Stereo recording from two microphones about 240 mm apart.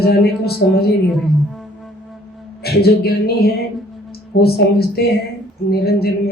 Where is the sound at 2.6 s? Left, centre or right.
Left.